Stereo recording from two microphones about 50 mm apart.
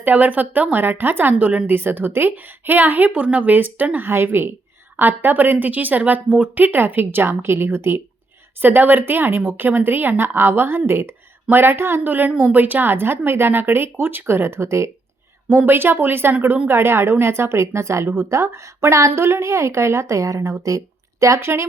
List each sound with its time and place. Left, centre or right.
0.0 s a woman's voice: right
4.1 s a woman's voice: right
8.6 s speech: right
15.4 s a woman's voice: right